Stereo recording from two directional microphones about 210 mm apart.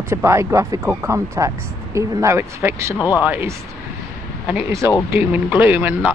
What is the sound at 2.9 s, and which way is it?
Speech, 15° left (ahead or behind).